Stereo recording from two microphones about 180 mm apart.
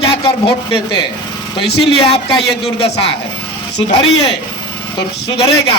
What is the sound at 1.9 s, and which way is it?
Speech, 30° left (ahead or behind).